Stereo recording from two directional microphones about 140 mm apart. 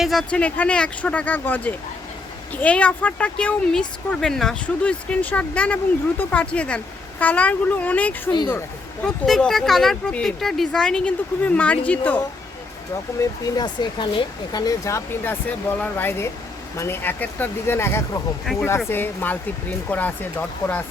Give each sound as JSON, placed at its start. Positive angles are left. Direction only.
{"t": 0.0, "sound": "speech", "side_deg": 0}
{"t": 9.0, "sound": "speech", "side_deg": 5}
{"t": 13.4, "sound": "speech", "side_deg": 30}